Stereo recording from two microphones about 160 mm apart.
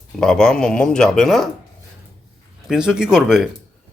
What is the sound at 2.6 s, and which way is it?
Speech, 5° right (ahead or behind).